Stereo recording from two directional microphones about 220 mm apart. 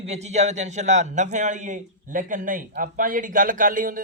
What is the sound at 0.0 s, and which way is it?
A man's voice, 30° right (ahead or behind).